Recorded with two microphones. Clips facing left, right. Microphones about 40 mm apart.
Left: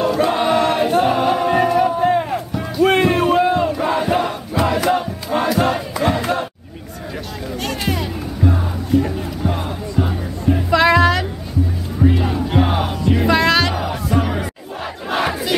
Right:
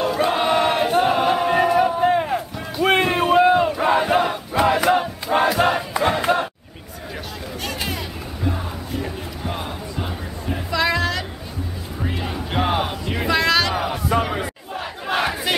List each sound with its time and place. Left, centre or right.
0.0 s choir: centre
7.6 s music: centre
10.7 s music: left
12.0 s music: centre
13.3 s music: centre
13.7 s music: centre
14.8 s crowd: centre